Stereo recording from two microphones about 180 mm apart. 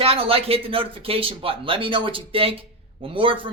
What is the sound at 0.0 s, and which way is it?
Speech, 30° right (ahead or behind).